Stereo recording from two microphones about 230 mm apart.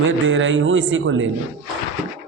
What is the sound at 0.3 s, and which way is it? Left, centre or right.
A man's voice, right.